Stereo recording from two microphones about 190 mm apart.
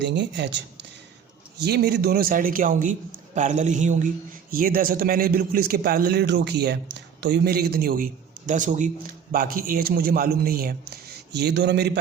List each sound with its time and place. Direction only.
0.0 s a man's voice: 65° right (ahead or behind)